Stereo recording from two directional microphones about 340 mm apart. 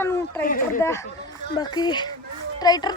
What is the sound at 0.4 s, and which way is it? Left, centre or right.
Speech, left.